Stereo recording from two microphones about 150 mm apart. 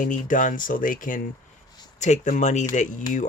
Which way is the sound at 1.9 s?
50° left (ahead or behind).